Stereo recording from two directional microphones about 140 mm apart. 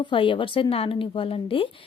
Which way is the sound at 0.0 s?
35° left (ahead or behind).